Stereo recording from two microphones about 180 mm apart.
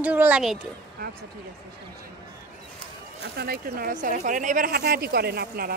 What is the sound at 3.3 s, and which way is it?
Speech, 60° right (ahead or behind).